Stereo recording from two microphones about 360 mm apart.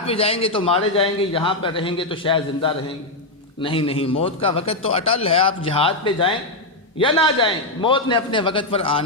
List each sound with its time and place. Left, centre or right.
0.0 s a man's voice: centre